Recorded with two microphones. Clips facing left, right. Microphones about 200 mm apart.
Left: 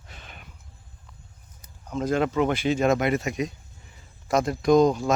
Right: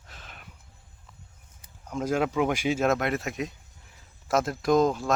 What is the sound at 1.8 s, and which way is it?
Speech, 10° right (ahead or behind).